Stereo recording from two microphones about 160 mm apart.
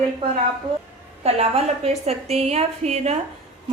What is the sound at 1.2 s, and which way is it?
A woman's voice, 40° right (ahead or behind).